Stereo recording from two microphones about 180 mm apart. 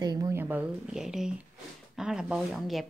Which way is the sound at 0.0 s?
20° right (ahead or behind).